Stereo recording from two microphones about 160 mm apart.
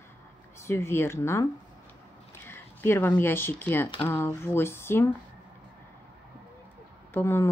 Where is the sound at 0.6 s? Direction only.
15° left (ahead or behind).